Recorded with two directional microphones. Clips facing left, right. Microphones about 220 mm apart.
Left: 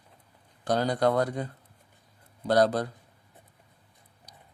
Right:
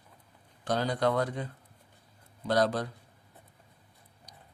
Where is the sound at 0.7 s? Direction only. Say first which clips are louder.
Left 3 dB; 40° left (ahead or behind).